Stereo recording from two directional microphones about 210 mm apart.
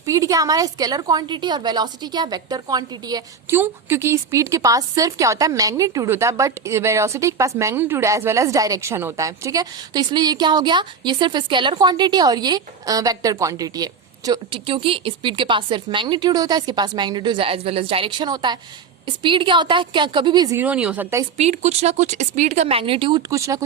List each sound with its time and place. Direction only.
0.0 s a woman's voice: 15° right (ahead or behind)
20.6 s a woman's voice: 5° right (ahead or behind)
21.3 s speech: 30° right (ahead or behind); by 23.6 s 15° right (ahead or behind)